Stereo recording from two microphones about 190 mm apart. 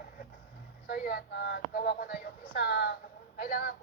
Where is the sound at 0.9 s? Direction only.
55° left (ahead or behind).